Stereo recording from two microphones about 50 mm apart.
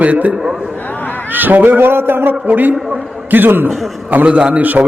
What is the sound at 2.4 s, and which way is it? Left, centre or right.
A man's voice, right.